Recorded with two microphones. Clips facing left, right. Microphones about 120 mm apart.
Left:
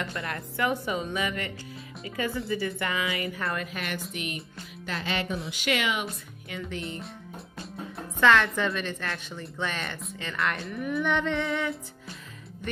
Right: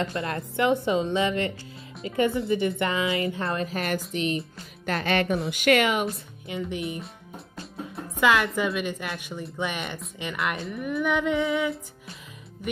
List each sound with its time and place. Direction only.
0.0 s a woman's voice: 30° right (ahead or behind)
4.8 s music: 55° right (ahead or behind)
5.5 s speech: 55° right (ahead or behind)
6.5 s a woman's voice: 20° right (ahead or behind)
8.2 s a woman's voice: 10° right (ahead or behind)